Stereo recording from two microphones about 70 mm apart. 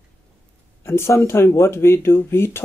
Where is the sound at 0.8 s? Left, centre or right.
Left.